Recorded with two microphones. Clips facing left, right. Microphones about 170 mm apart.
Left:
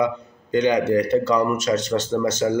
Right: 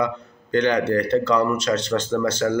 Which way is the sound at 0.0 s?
15° left (ahead or behind).